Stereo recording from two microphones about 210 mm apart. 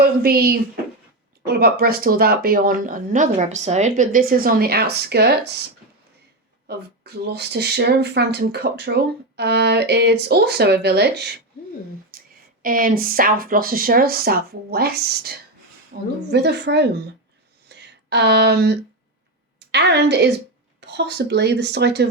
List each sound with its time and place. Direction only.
0.0 s speech: 45° right (ahead or behind)
6.7 s speech: 50° right (ahead or behind)
12.6 s speech: 40° right (ahead or behind)
16.3 s speech: 55° right (ahead or behind)
17.7 s a sound: 55° right (ahead or behind)
19.5 s a woman's voice: 55° right (ahead or behind)